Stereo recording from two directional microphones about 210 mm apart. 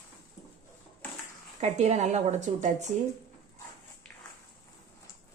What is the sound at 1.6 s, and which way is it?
A woman's voice, 30° right (ahead or behind).